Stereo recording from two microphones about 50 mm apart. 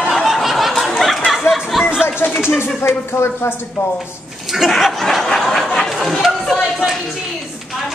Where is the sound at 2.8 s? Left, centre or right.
Left.